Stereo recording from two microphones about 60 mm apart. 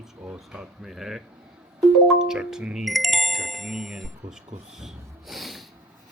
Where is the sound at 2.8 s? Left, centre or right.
Centre.